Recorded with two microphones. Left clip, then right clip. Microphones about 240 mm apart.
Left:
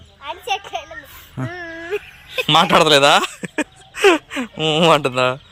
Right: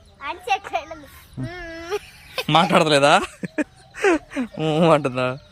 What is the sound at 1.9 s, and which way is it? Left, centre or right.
Speech, centre.